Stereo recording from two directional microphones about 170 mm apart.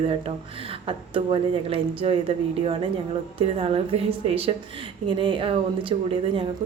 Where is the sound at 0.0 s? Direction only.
35° right (ahead or behind).